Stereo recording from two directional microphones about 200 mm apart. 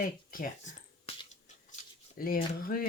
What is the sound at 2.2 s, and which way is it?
Speech, 45° left (ahead or behind).